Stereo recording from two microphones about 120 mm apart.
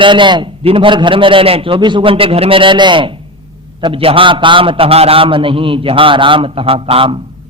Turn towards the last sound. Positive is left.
turn(degrees=-50)  # may be behind; listen again after turning